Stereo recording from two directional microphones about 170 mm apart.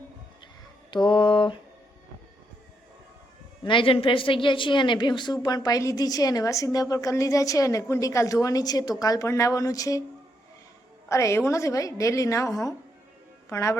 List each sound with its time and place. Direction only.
1.0 s a woman's voice: 25° left (ahead or behind)
3.6 s a woman's voice: 30° left (ahead or behind)
11.1 s a woman's voice: 15° left (ahead or behind)